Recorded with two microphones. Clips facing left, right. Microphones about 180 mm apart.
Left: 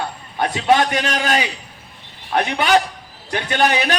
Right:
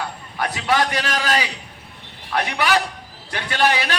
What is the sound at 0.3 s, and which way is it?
A man's voice, 25° left (ahead or behind).